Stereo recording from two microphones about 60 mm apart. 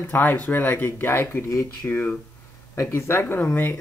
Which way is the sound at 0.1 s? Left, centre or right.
Left.